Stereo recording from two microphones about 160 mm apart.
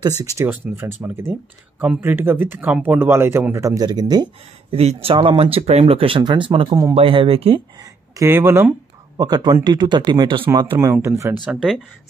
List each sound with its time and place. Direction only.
0.2 s speech: 20° right (ahead or behind); by 7.6 s 35° right (ahead or behind)
8.2 s speech: 15° right (ahead or behind)